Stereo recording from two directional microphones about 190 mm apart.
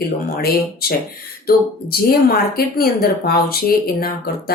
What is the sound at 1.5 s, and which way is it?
Speech, 50° left (ahead or behind).